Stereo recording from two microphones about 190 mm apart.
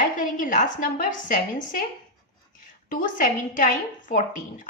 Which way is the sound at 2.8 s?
45° left (ahead or behind).